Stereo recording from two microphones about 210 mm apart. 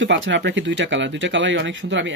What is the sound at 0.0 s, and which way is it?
Speech, 60° right (ahead or behind).